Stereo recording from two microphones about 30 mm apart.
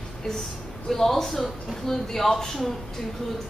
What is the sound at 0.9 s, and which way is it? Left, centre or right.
A woman's voice, centre.